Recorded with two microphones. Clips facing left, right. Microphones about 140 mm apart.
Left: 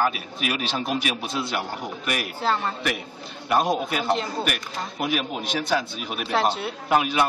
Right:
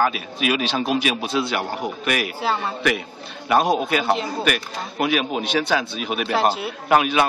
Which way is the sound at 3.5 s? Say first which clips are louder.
Right 4 dB; 85° right.